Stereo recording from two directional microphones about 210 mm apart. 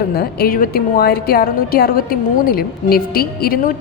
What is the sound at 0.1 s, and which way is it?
A woman's voice, 50° left (ahead or behind).